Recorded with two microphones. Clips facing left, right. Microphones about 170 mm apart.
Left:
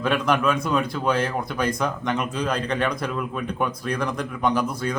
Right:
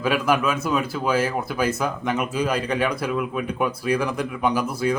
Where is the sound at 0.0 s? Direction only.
5° right (ahead or behind).